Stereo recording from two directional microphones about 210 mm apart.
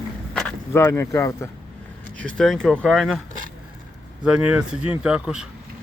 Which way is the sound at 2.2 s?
5° left (ahead or behind).